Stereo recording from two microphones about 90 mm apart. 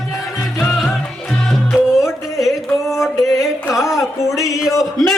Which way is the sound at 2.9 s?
Centre (ahead or behind).